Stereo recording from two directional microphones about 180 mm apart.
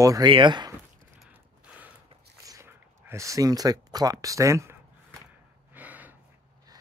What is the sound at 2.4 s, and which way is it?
Speech, 15° right (ahead or behind).